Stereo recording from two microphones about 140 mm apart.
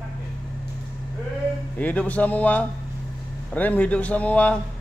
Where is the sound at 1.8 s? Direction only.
10° left (ahead or behind).